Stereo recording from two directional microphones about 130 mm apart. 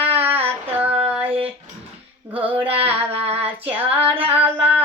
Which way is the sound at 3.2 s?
50° right (ahead or behind).